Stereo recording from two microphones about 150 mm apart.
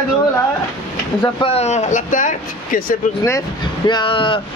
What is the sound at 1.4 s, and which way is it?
Speech, 40° left (ahead or behind).